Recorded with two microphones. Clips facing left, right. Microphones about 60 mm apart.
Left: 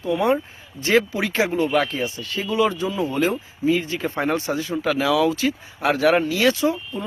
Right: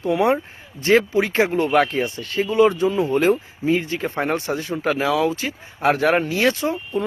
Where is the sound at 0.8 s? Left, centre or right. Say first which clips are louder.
Right 3 dB; right.